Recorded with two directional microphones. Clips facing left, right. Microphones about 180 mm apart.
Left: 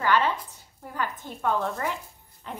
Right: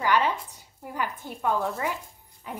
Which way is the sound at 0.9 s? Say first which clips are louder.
Even; 10° right (ahead or behind).